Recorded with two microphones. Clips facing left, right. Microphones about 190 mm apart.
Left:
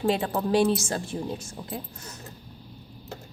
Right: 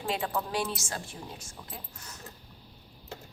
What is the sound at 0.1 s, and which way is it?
Speech, 30° left (ahead or behind).